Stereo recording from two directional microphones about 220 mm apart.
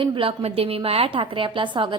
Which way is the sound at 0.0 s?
25° right (ahead or behind).